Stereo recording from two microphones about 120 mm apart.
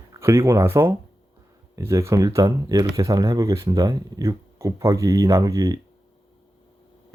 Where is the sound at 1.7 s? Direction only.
25° right (ahead or behind).